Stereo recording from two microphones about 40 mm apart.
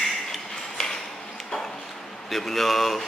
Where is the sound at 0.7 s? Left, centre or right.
Centre.